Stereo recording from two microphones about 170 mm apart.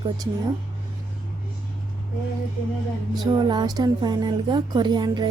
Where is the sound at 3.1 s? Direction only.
25° right (ahead or behind).